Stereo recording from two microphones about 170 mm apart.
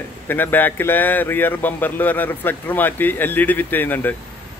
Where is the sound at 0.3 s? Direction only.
10° left (ahead or behind).